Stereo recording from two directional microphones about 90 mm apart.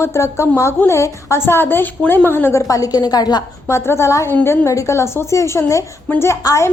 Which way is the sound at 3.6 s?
30° left (ahead or behind).